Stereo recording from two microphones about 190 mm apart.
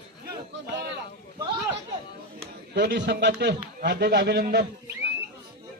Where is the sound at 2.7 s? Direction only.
65° right (ahead or behind).